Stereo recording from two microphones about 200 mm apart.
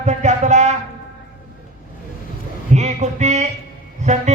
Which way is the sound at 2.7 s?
35° right (ahead or behind).